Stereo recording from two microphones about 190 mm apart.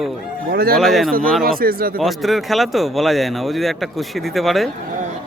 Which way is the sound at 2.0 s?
Centre (ahead or behind).